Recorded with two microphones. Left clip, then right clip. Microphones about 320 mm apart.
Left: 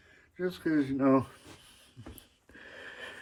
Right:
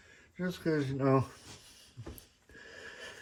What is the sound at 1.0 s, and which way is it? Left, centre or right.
Speech, centre.